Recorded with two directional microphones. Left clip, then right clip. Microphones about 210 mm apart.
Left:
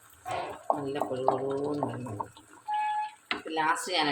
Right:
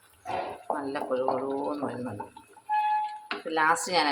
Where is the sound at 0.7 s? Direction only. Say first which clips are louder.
Left 2 dB; 5° right (ahead or behind).